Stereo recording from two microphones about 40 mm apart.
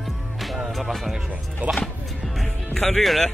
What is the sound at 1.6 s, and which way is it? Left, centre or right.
Speech, right.